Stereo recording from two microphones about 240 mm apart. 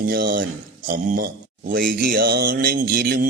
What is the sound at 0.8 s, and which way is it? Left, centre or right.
A man's voice, right.